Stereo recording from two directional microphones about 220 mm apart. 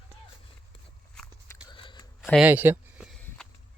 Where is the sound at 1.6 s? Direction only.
20° left (ahead or behind).